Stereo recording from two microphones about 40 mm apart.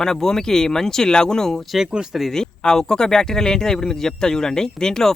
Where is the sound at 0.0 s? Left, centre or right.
Centre.